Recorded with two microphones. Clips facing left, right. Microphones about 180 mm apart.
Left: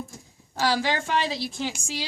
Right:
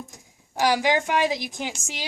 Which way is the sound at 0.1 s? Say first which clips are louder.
Right 1 dB; 15° right (ahead or behind).